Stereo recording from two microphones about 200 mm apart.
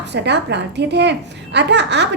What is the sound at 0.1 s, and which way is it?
A woman's voice, 60° right (ahead or behind).